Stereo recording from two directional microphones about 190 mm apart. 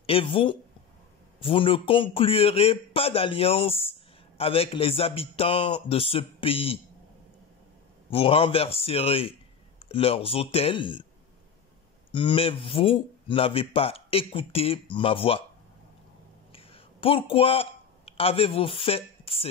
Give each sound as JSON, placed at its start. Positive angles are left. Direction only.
{"t": 0.0, "sound": "speech", "side_deg": 30}
{"t": 8.1, "sound": "speech", "side_deg": 30}
{"t": 12.1, "sound": "speech", "side_deg": 25}
{"t": 16.5, "sound": "a sound", "side_deg": 30}